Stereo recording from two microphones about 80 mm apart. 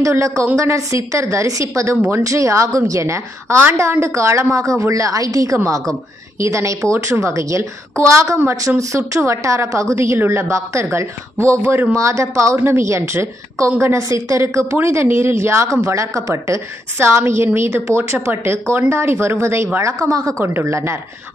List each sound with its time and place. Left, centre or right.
0.0 s a woman's voice: right
14.8 s a woman's voice: right
20.3 s a woman's voice: right